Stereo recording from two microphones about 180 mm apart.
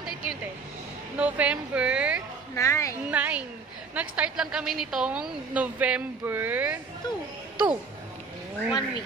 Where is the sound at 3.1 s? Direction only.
10° right (ahead or behind).